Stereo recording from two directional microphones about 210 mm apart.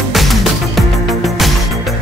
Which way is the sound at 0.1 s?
Centre (ahead or behind).